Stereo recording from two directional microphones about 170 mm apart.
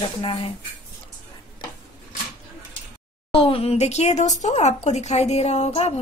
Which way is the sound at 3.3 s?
35° left (ahead or behind).